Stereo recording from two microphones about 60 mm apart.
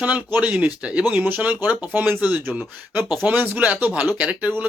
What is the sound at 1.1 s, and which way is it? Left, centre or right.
Speech, right.